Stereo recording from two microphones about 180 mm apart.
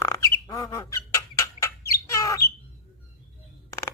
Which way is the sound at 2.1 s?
15° left (ahead or behind).